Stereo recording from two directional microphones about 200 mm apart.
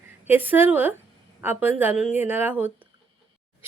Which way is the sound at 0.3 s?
10° right (ahead or behind).